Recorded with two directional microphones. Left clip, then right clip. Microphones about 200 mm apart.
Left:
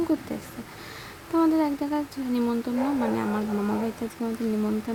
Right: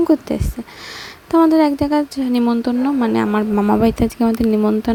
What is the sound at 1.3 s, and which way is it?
Speech, 40° right (ahead or behind).